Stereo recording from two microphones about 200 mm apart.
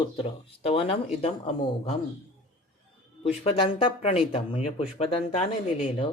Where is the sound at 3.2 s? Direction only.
30° left (ahead or behind).